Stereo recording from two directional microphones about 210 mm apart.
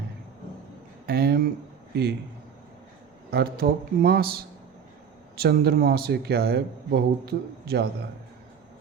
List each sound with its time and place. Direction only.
1.0 s speech: 45° right (ahead or behind)
3.2 s speech: 45° right (ahead or behind)
5.4 s speech: 50° right (ahead or behind)